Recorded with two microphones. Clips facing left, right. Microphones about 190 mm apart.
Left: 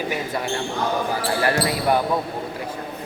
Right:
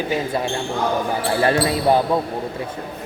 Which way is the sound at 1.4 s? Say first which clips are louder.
Right 5 dB; 25° right (ahead or behind).